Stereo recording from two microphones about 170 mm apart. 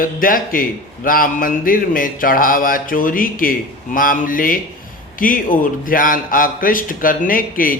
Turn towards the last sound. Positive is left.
turn(degrees=55)  # may be behind; listen again after turning